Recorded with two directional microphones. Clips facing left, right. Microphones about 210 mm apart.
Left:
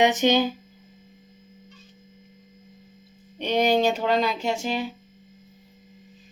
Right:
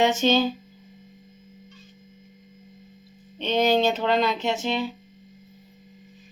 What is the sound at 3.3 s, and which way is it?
Speech, 10° left (ahead or behind).